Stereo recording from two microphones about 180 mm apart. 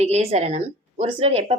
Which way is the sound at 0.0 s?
35° right (ahead or behind).